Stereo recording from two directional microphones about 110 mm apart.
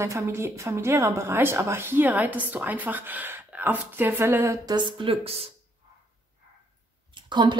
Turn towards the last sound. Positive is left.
turn(degrees=-45)  # may be behind; listen again after turning